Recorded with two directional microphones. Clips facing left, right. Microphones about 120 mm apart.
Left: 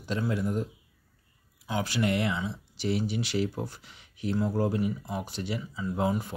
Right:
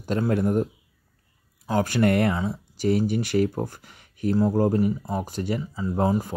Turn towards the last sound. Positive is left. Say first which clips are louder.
# right 5 dB
turn(degrees=-40)  # may be behind; listen again after turning